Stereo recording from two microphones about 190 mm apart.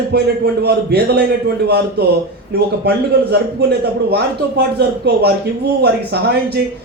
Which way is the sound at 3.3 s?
60° right (ahead or behind).